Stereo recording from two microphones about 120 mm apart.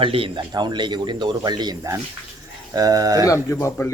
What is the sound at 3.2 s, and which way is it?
Speech, 25° left (ahead or behind).